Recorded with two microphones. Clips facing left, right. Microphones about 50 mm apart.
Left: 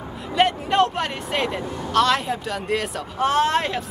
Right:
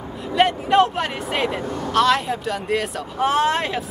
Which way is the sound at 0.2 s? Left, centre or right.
Centre.